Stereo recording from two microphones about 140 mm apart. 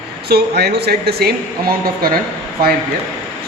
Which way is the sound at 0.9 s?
90° right.